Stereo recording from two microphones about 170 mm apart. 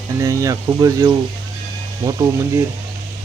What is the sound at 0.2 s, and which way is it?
Speech, 20° right (ahead or behind).